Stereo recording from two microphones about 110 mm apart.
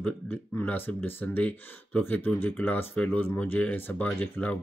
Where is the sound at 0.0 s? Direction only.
15° left (ahead or behind).